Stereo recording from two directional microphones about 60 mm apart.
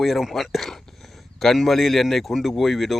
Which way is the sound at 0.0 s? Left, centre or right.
Centre.